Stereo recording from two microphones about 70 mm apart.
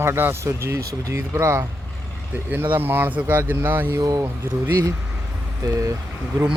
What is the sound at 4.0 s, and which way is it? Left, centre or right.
Speech, right.